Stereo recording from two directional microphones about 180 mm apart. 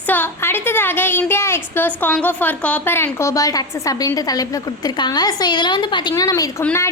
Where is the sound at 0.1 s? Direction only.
10° left (ahead or behind).